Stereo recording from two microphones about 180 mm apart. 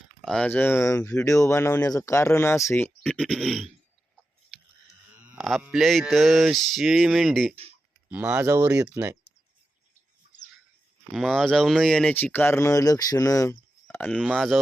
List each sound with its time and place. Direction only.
0.2 s speech: 5° left (ahead or behind)
3.0 s mantra: centre (ahead or behind)
5.2 s mantra: 5° right (ahead or behind)
8.1 s speech: 10° right (ahead or behind)
11.1 s speech: centre (ahead or behind)
14.3 s mantra: centre (ahead or behind)